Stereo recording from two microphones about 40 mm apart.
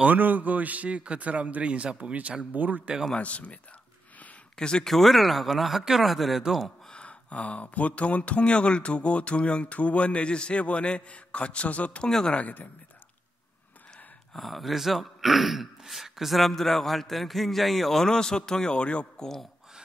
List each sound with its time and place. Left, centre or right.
0.1 s a man's voice: right
2.5 s speech: right
3.2 s speech: left
4.6 s speech: left
4.8 s speech: centre
6.9 s speech: left
12.0 s a man's voice: centre
12.3 s speech: left
14.3 s speech: centre
16.3 s a man's voice: centre; by 19.0 s left
19.1 s speech: centre